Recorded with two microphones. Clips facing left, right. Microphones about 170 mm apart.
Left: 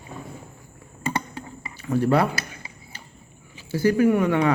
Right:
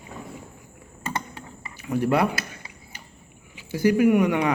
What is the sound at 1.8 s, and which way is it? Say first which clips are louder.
Speech: left 2 dB; 15° right (ahead or behind).